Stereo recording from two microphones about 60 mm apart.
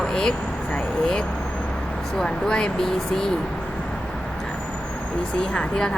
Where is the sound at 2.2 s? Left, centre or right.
Centre.